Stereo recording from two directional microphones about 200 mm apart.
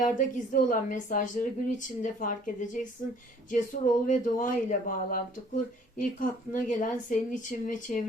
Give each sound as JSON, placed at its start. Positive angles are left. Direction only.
{"t": 0.0, "sound": "a woman's voice", "side_deg": 40}